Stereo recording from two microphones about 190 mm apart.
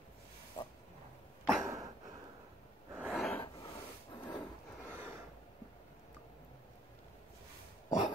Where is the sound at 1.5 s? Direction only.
15° right (ahead or behind).